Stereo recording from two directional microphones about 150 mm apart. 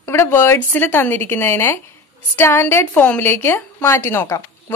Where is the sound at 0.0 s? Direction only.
15° left (ahead or behind).